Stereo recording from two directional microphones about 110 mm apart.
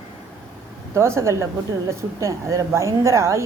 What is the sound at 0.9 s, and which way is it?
A woman's voice, 25° right (ahead or behind).